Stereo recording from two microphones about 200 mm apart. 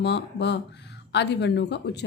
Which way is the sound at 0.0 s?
60° left (ahead or behind).